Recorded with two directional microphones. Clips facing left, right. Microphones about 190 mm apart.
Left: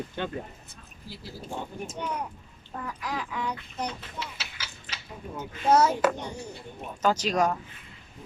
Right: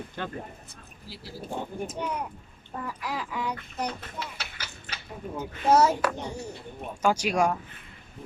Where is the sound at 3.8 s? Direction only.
55° right (ahead or behind).